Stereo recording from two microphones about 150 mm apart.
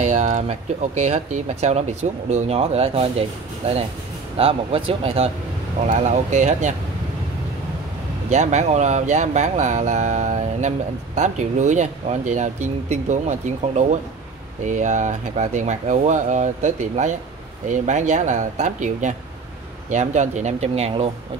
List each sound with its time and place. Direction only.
0.0 s a sound: 55° right (ahead or behind)
1.0 s speech: 50° right (ahead or behind)
5.9 s speech: 55° right (ahead or behind)
8.3 s speech: 50° right (ahead or behind)